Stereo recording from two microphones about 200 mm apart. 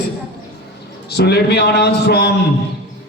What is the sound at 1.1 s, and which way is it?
A man's voice, 55° left (ahead or behind).